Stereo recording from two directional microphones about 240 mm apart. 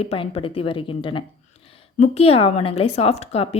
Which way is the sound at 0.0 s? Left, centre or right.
Left.